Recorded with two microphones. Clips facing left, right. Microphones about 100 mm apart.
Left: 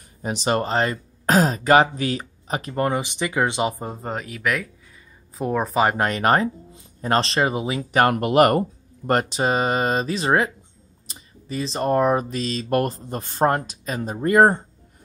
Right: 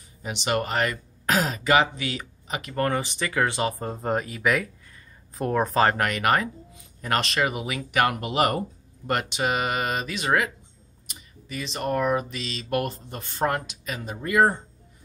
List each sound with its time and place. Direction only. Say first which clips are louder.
0.2 s speech: left 4 dB; 35° left (ahead or behind)
2.7 s speech: left 2 dB; 20° left (ahead or behind)
3.9 s speech: right 3 dB; centre (ahead or behind)
5.9 s speech: left 4 dB; 30° left (ahead or behind)
8.0 s speech: left 6 dB; 50° left (ahead or behind)